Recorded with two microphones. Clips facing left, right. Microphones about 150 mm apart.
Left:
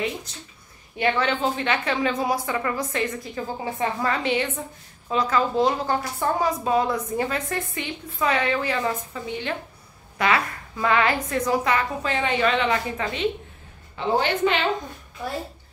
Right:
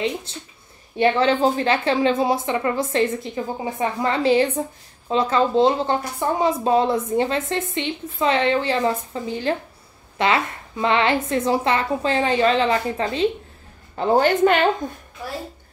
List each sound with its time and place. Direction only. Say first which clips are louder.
0.0 s a woman's voice: right 4 dB; 30° right (ahead or behind)
13.9 s a woman's voice: right 6 dB; 45° right (ahead or behind)